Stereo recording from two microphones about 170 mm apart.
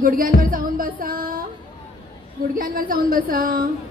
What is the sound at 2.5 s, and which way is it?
A woman's voice, 55° right (ahead or behind).